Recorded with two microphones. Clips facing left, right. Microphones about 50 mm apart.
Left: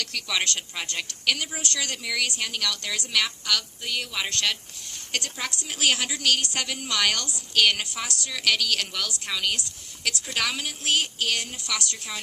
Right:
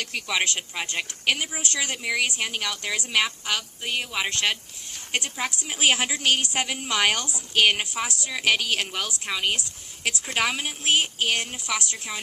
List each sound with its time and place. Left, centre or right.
0.0 s speech: right